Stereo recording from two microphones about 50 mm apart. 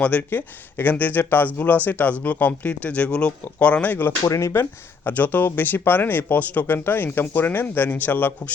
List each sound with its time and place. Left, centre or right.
0.2 s speech: left
4.3 s speech: left
5.0 s speech: left